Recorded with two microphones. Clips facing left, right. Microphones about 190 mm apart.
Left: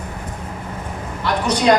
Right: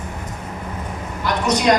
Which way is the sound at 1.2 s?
30° left (ahead or behind).